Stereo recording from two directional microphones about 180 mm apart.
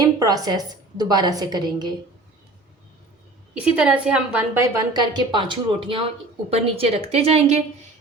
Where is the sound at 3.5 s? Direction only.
5° right (ahead or behind).